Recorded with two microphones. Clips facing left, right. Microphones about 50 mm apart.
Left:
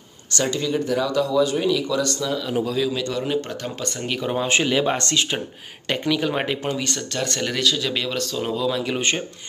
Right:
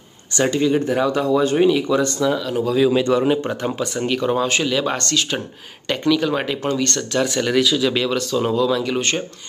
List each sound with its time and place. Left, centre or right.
0.3 s speech: right
2.4 s speech: centre
2.9 s speech: right
3.8 s speech: centre
4.5 s speech: left
7.1 s speech: centre